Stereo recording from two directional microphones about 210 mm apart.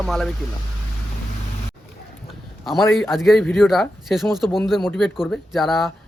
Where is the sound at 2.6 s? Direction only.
Centre (ahead or behind).